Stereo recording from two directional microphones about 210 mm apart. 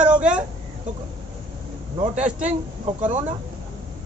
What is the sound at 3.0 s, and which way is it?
Speech, 35° right (ahead or behind).